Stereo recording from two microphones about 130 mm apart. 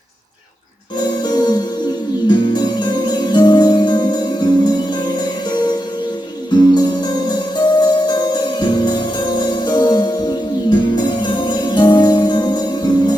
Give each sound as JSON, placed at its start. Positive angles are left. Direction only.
{"t": 1.2, "sound": "music", "side_deg": 30}
{"t": 6.7, "sound": "music", "side_deg": 35}